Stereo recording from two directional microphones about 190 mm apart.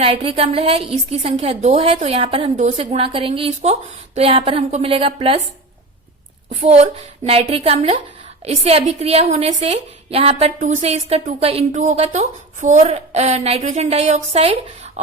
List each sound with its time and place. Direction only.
0.0 s a woman's voice: 30° right (ahead or behind)
6.5 s a woman's voice: 35° right (ahead or behind)
15.0 s a sound: 35° right (ahead or behind)